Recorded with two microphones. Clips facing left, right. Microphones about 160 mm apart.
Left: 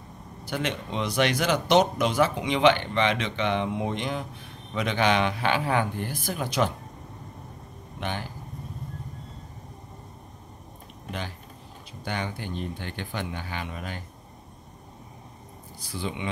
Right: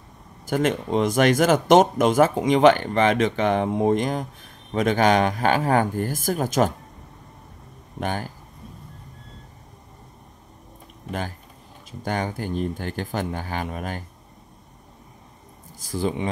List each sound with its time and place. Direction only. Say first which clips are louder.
0.5 s speech: right 8 dB; 45° right (ahead or behind)
8.0 s speech: right 5 dB; 45° right (ahead or behind)
11.1 s speech: right 5 dB; 45° right (ahead or behind)
15.8 s speech: right 8 dB; 45° right (ahead or behind)